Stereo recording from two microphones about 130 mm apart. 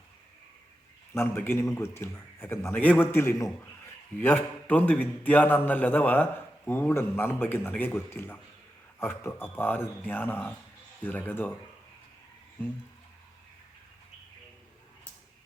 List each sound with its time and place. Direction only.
1.1 s a man's voice: 15° left (ahead or behind)